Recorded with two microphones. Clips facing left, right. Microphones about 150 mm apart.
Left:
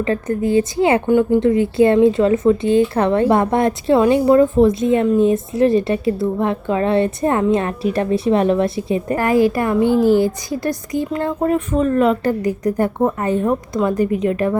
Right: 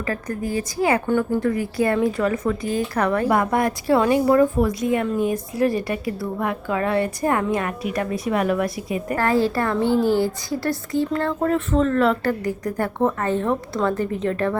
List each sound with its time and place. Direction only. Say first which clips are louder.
0.0 s a woman's voice: left 7 dB; 25° left (ahead or behind)
9.1 s a woman's voice: left 4 dB; 15° left (ahead or behind)